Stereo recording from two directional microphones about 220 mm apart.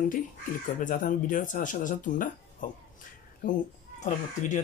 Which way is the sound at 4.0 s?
35° left (ahead or behind).